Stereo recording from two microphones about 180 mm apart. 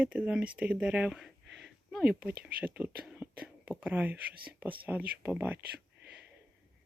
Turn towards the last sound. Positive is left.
turn(degrees=-10)  # may be behind; listen again after turning